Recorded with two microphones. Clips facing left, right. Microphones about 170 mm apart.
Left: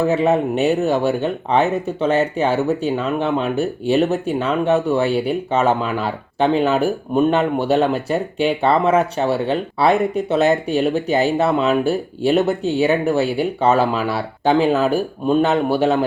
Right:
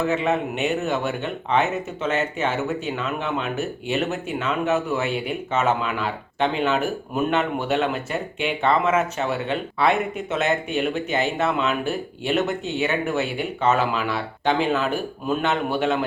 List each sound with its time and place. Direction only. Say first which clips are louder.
0.1 s speech: left 6 dB; 35° left (ahead or behind)